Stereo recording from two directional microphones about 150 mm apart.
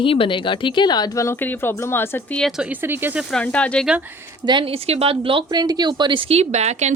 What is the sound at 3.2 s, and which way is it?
Speech, 5° left (ahead or behind).